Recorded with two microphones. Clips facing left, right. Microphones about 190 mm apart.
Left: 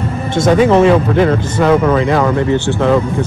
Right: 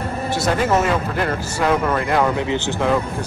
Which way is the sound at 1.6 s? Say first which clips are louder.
Left 7 dB; 5° right (ahead or behind).